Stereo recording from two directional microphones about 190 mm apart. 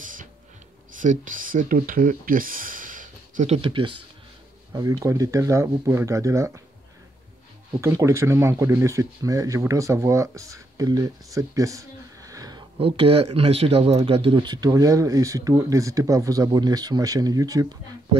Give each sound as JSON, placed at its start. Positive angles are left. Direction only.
{"t": 0.0, "sound": "music", "side_deg": -45}
{"t": 0.9, "sound": "speech", "side_deg": -45}
{"t": 7.8, "sound": "speech", "side_deg": -15}